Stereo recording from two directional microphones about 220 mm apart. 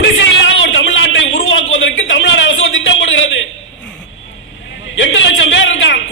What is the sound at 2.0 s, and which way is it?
A man's voice, 60° left (ahead or behind).